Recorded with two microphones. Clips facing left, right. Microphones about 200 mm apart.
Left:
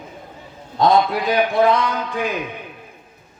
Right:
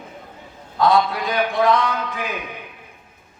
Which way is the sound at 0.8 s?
30° left (ahead or behind).